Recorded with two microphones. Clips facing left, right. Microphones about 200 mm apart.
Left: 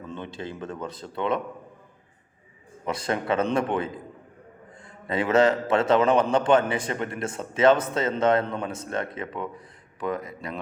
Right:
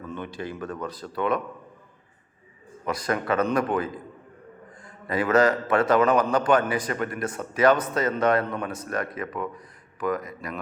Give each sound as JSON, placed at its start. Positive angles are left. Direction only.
{"t": 0.0, "sound": "a man's voice", "side_deg": 25}
{"t": 2.8, "sound": "a man's voice", "side_deg": 25}